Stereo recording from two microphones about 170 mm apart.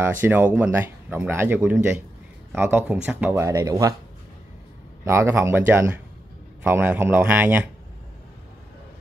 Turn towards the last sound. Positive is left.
turn(degrees=-10)  # may be behind; listen again after turning